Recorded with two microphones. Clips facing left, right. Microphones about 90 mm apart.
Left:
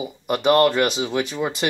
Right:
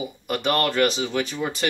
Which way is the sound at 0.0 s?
15° left (ahead or behind).